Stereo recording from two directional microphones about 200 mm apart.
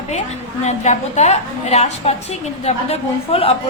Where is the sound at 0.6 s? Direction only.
35° left (ahead or behind).